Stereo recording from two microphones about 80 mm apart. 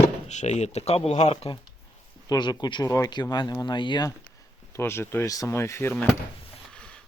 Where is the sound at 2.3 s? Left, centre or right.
Left.